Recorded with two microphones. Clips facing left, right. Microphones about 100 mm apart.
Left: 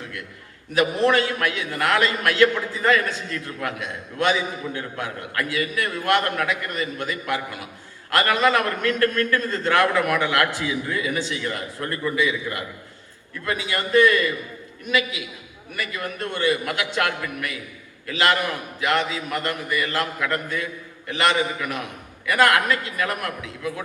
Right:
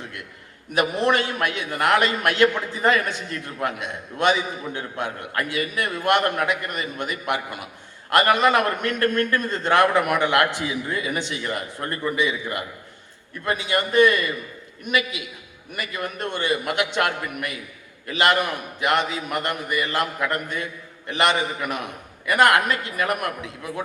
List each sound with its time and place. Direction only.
0.7 s a man's voice: 20° right (ahead or behind)
13.4 s a man's voice: 20° right (ahead or behind)